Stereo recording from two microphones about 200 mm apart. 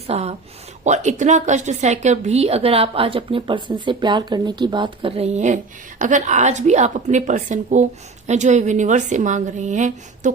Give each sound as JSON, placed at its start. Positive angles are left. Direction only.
{"t": 0.1, "sound": "a woman's voice", "side_deg": -30}